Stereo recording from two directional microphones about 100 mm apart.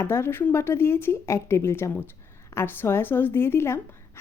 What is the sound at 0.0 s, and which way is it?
A woman's voice, 25° left (ahead or behind).